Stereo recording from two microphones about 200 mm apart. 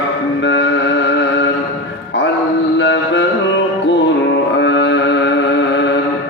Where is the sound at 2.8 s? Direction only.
65° left (ahead or behind).